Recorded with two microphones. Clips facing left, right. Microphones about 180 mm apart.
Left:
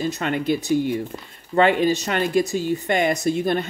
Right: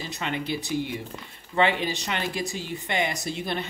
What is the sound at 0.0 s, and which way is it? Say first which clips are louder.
Speech: left 8 dB; 50° left (ahead or behind).